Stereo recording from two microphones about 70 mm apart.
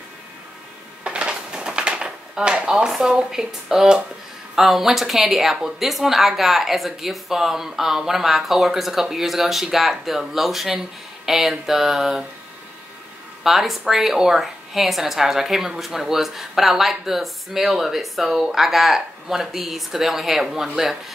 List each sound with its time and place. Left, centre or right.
1.0 s typewriter: centre
4.6 s a woman's voice: centre
13.4 s a woman's voice: centre